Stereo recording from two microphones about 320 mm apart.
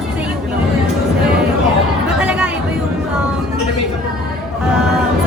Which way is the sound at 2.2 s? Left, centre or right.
Centre.